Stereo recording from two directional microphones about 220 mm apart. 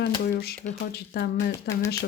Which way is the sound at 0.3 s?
40° left (ahead or behind).